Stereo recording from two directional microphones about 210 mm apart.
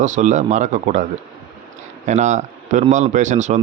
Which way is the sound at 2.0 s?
35° right (ahead or behind).